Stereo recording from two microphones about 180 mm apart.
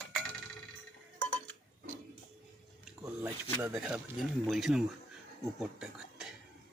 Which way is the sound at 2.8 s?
5° right (ahead or behind).